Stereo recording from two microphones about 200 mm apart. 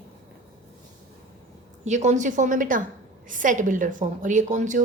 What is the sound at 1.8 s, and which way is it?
A woman's voice, 35° right (ahead or behind).